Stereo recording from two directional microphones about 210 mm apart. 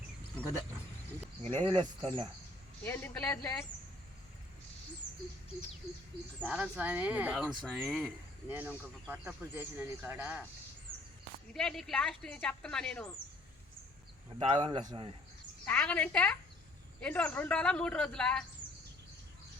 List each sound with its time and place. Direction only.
1.6 s a man's voice: 25° right (ahead or behind)
2.8 s speech: 10° left (ahead or behind)
6.4 s speech: 5° right (ahead or behind)
11.5 s speech: centre (ahead or behind)
14.3 s a man's voice: 25° right (ahead or behind)
15.6 s speech: 10° left (ahead or behind)